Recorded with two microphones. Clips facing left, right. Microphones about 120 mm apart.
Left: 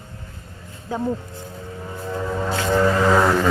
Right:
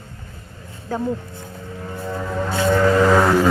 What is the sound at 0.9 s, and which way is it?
Speech, 15° left (ahead or behind).